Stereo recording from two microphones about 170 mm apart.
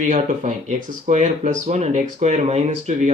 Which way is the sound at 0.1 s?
40° right (ahead or behind).